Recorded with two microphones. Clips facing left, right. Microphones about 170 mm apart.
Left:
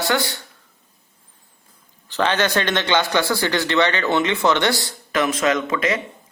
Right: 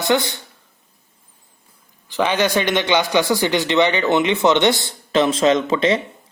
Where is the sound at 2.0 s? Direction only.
10° right (ahead or behind).